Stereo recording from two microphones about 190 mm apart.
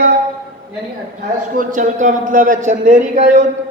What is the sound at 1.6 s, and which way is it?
A man's voice, 40° right (ahead or behind).